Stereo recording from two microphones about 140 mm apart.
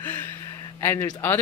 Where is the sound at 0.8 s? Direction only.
15° left (ahead or behind).